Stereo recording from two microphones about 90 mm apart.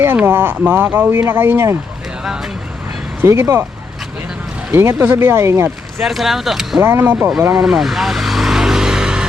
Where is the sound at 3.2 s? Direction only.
30° right (ahead or behind).